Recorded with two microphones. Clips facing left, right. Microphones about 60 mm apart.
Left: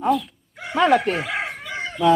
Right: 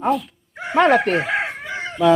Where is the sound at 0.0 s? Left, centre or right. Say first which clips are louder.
Even; right.